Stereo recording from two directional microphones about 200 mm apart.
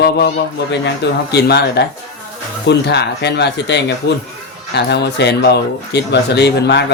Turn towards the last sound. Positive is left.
turn(degrees=60)  # may be behind; listen again after turning